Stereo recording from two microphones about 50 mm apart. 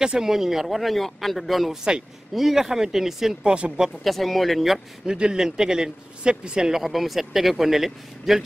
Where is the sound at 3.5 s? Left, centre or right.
Right.